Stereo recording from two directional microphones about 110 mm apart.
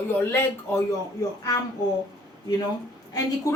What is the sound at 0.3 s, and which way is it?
Speech, 20° left (ahead or behind).